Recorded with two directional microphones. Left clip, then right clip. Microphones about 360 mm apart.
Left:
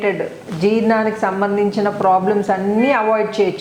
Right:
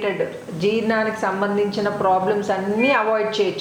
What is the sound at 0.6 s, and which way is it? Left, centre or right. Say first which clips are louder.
A woman's voice: left 4 dB; left.